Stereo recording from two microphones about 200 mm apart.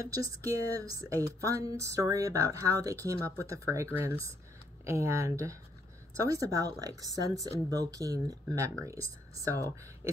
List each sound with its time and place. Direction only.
0.1 s speech: 15° right (ahead or behind)